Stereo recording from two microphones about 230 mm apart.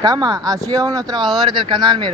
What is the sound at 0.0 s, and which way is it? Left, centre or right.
Speech, centre.